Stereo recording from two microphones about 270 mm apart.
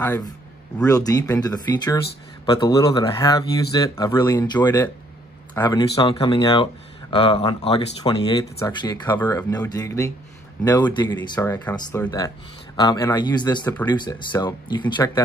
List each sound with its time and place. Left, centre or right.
0.0 s speech: centre